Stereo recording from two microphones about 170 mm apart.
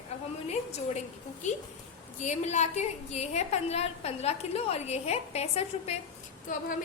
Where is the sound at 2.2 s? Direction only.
45° left (ahead or behind).